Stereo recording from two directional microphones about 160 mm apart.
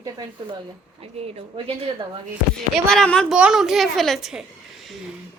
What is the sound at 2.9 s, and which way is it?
A woman's voice, 5° left (ahead or behind).